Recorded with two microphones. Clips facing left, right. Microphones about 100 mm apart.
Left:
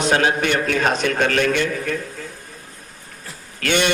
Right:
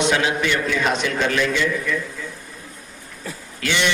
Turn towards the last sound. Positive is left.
turn(degrees=55)  # may be behind; listen again after turning